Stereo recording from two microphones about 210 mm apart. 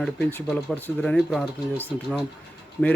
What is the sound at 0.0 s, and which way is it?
Speech, 5° left (ahead or behind).